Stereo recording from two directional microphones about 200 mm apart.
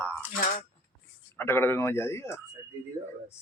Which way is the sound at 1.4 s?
10° left (ahead or behind).